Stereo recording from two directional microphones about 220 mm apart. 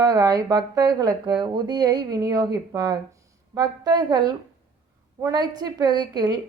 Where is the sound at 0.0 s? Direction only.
15° right (ahead or behind).